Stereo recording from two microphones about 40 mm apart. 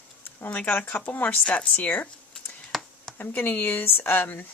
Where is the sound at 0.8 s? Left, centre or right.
Left.